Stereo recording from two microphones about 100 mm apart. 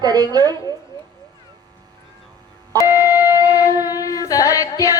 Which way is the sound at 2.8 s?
35° left (ahead or behind).